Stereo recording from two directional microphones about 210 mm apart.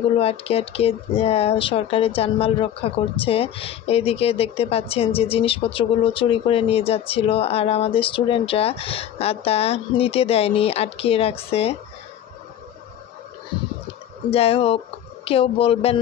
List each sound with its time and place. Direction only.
0.2 s speech: 30° left (ahead or behind)
14.3 s speech: 25° left (ahead or behind)